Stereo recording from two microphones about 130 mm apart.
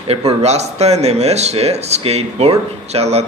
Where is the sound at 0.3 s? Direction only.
55° right (ahead or behind).